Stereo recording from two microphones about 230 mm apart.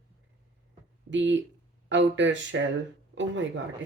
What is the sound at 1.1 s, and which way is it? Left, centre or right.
A woman's voice, right.